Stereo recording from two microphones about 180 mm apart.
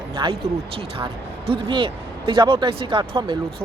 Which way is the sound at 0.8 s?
30° right (ahead or behind).